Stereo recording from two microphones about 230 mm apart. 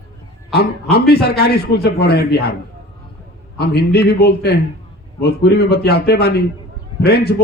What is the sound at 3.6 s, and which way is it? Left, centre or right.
A man's voice, left.